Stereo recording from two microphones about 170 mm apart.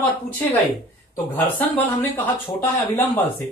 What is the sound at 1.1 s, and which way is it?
Speech, 10° left (ahead or behind).